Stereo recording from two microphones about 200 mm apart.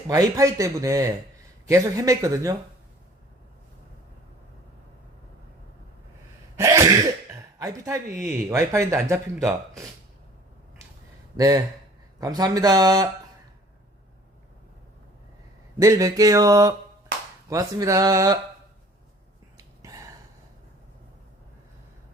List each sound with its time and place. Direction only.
0.1 s speech: 15° right (ahead or behind)
6.6 s cough: 15° right (ahead or behind)
7.6 s speech: 15° right (ahead or behind)
11.3 s speech: 15° right (ahead or behind)
15.8 s speech: 15° right (ahead or behind)
19.5 s a sound: 15° right (ahead or behind)